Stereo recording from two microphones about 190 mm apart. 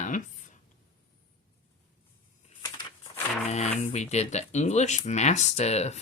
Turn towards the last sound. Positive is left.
turn(degrees=35)  # may be behind; listen again after turning